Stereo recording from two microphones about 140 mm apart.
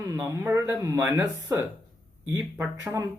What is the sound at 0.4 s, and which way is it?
Speech, 15° right (ahead or behind).